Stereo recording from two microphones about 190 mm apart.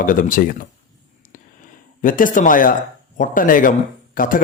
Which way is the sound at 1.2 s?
45° left (ahead or behind).